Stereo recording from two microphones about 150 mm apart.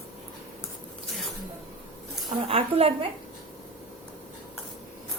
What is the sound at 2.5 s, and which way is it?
Speech, 40° right (ahead or behind).